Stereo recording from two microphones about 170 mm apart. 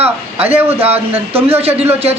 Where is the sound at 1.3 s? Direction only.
35° right (ahead or behind).